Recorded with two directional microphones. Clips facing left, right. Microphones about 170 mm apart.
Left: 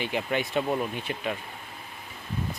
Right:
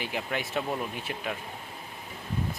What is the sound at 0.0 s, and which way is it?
Speech, centre (ahead or behind).